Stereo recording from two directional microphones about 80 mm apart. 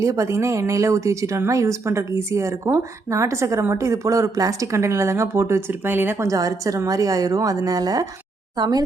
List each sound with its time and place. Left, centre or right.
0.0 s a woman's voice: right
6.2 s a woman's voice: right